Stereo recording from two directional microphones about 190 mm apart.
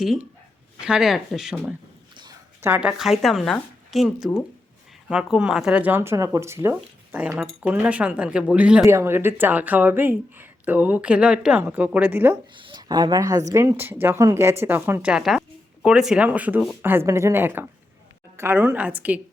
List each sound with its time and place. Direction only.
0.8 s speech: 5° right (ahead or behind)
2.1 s a sound: 20° right (ahead or behind)
2.6 s speech: 5° right (ahead or behind)
12.5 s a woman's voice: 25° right (ahead or behind); by 19.2 s 10° right (ahead or behind)